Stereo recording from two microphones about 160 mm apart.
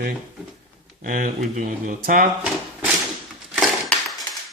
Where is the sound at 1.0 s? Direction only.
60° right (ahead or behind).